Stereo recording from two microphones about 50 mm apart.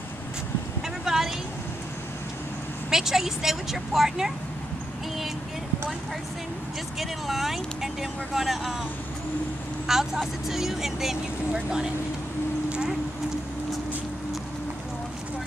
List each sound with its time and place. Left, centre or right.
1.0 s vehicle: centre
2.9 s speech: centre
7.0 s speech: centre
9.8 s speech: centre